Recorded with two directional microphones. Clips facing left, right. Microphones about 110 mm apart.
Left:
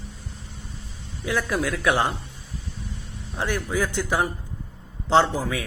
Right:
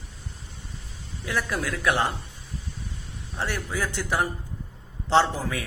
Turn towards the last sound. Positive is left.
turn(degrees=15)  # may be behind; listen again after turning